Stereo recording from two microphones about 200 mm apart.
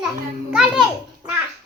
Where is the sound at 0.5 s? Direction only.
5° right (ahead or behind).